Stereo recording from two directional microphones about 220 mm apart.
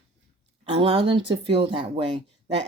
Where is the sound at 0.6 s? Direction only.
25° right (ahead or behind).